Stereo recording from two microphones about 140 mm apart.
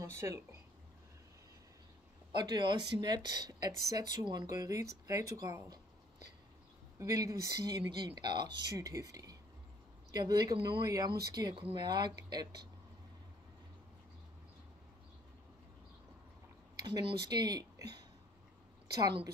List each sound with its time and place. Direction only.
0.0 s speech: 20° right (ahead or behind)
2.3 s speech: 30° right (ahead or behind)
7.0 s speech: 25° right (ahead or behind)
16.8 s speech: 30° right (ahead or behind)